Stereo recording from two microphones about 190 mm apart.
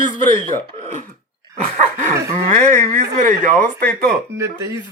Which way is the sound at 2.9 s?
40° right (ahead or behind).